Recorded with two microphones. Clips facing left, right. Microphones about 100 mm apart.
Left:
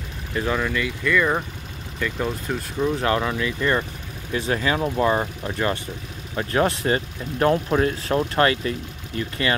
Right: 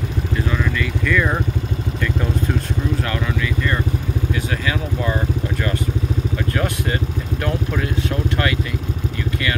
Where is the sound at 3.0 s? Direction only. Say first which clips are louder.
Left 2 dB; 25° left (ahead or behind).